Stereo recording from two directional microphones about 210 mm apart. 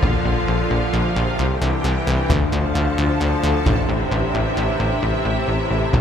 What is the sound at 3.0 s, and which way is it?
Music, centre (ahead or behind).